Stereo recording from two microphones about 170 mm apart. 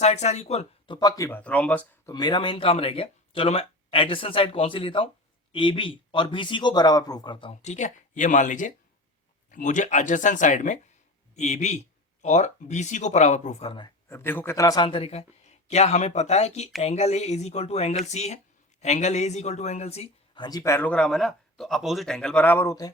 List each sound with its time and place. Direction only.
0.0 s speech: 40° left (ahead or behind)
0.9 s speech: 20° left (ahead or behind)
2.0 s speech: 25° left (ahead or behind)
14.1 s speech: 15° left (ahead or behind)